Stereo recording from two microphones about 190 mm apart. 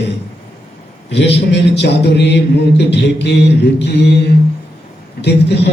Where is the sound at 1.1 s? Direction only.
65° left (ahead or behind).